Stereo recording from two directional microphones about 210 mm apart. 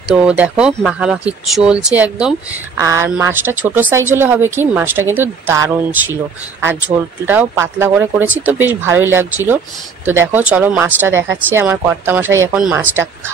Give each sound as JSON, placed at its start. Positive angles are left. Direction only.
{"t": 0.1, "sound": "speech", "side_deg": -5}